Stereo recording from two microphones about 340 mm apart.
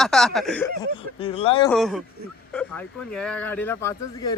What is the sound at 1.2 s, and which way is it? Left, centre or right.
Speech, centre.